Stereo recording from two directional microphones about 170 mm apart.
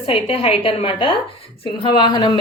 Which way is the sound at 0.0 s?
35° left (ahead or behind).